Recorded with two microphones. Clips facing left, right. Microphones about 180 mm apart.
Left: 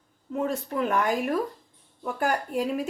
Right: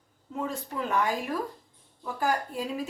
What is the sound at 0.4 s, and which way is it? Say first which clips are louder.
A woman's voice: left 5 dB; 65° left (ahead or behind).